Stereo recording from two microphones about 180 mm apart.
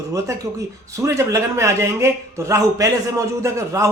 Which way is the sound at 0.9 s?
15° right (ahead or behind).